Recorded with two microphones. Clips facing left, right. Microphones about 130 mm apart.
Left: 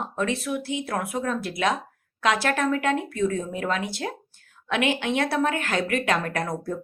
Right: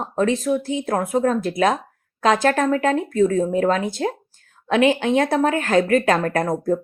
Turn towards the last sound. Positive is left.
turn(degrees=-45)  # may be behind; listen again after turning